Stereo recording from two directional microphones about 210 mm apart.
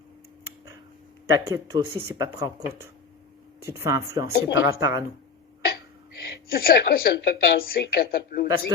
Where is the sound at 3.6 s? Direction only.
15° right (ahead or behind).